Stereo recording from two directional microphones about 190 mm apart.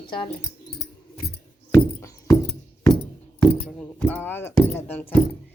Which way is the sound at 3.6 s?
5° left (ahead or behind).